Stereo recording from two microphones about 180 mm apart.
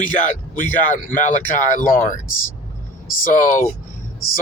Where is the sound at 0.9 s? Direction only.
45° left (ahead or behind).